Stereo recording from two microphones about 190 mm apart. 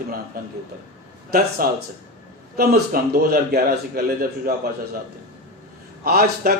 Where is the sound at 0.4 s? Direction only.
50° right (ahead or behind).